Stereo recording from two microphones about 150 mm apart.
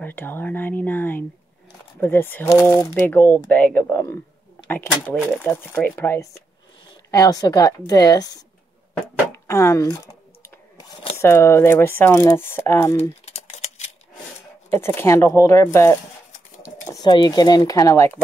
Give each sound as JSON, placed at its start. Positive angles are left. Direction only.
{"t": 0.0, "sound": "a woman's voice", "side_deg": 15}
{"t": 10.8, "sound": "a sound", "side_deg": 30}
{"t": 11.1, "sound": "speech", "side_deg": 15}
{"t": 13.3, "sound": "a sound", "side_deg": 45}
{"t": 14.7, "sound": "a woman's voice", "side_deg": 15}
{"t": 17.0, "sound": "a woman's voice", "side_deg": 30}